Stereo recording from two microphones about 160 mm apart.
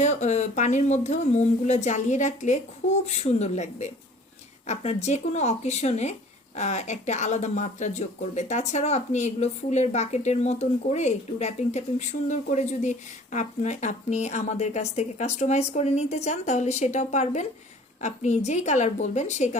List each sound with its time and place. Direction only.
0.0 s speech: 45° left (ahead or behind)